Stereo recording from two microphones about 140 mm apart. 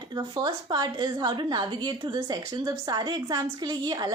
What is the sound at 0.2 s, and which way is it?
A woman's voice, 30° right (ahead or behind).